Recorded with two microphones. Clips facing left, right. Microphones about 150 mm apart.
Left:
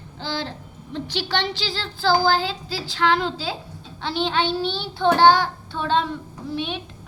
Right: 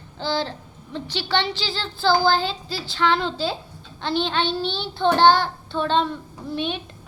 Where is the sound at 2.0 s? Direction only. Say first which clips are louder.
Even; 10° left (ahead or behind).